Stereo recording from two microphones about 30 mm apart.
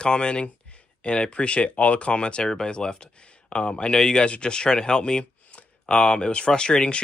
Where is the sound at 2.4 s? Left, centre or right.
Left.